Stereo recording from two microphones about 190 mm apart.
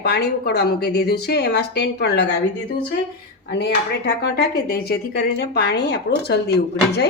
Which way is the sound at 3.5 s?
60° left (ahead or behind).